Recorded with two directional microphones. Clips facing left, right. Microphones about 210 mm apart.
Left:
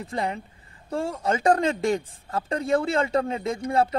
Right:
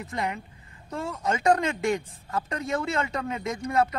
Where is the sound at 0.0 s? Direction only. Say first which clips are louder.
Left 2 dB; 30° left (ahead or behind).